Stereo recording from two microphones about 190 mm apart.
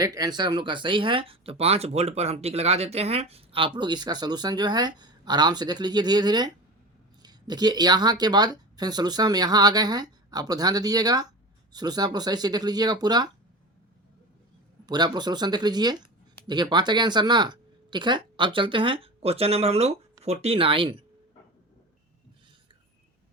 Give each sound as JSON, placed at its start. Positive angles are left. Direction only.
{"t": 0.0, "sound": "speech", "side_deg": -20}
{"t": 14.8, "sound": "speech", "side_deg": -20}